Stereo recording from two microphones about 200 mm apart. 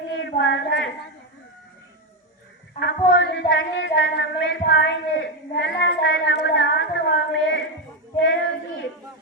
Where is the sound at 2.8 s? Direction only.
65° left (ahead or behind).